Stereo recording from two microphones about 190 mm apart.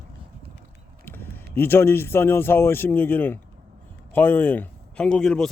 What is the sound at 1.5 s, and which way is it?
A man's voice, 10° left (ahead or behind).